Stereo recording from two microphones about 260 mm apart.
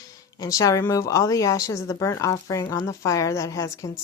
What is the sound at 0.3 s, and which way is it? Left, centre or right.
A woman's voice, centre.